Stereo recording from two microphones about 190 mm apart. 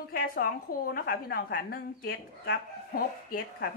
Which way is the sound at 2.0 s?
65° left (ahead or behind).